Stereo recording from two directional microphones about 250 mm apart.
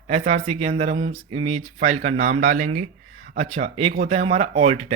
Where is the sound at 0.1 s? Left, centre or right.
Right.